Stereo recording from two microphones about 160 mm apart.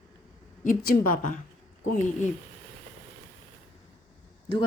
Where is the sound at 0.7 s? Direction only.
60° left (ahead or behind).